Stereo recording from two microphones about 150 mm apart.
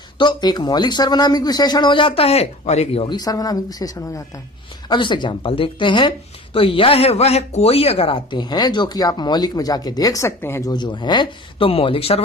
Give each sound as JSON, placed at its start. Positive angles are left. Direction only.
{"t": 0.2, "sound": "speech", "side_deg": 30}